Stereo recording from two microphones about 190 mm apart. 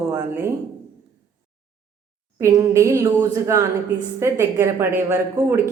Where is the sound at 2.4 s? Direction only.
15° right (ahead or behind).